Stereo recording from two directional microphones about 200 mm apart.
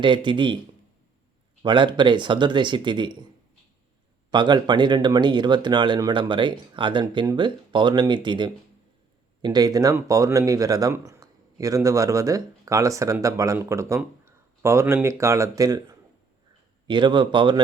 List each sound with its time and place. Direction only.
0.0 s speech: 25° right (ahead or behind)
1.6 s speech: 25° right (ahead or behind)
4.3 s speech: 20° right (ahead or behind)